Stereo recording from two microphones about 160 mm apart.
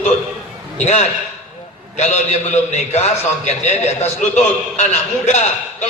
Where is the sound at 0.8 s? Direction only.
45° left (ahead or behind).